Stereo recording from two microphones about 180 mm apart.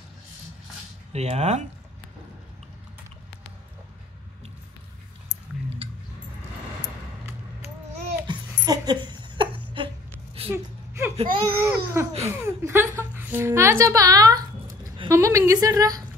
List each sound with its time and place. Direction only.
1.1 s speech: 35° right (ahead or behind)
8.3 s dog: 25° right (ahead or behind)
10.5 s a sound: 15° right (ahead or behind)
11.4 s a woman's voice: 10° right (ahead or behind)